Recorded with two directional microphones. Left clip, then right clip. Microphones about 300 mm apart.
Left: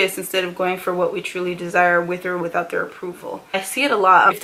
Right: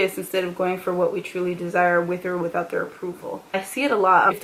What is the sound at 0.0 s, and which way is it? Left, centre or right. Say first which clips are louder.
Speech: left 3 dB; centre.